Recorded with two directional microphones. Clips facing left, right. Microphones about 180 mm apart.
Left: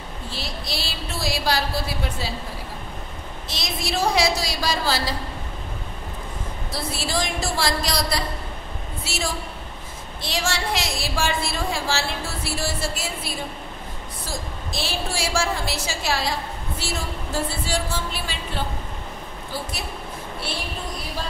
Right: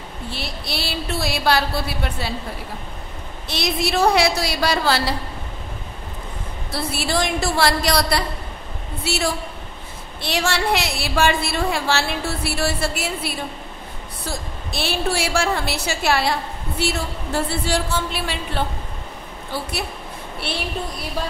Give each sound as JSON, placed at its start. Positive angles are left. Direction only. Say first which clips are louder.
{"t": 0.3, "sound": "a woman's voice", "louder": "right 2 dB", "side_deg": -60}
{"t": 3.4, "sound": "a woman's voice", "louder": "right 7 dB", "side_deg": -65}
{"t": 6.7, "sound": "a woman's voice", "louder": "right 4 dB", "side_deg": -65}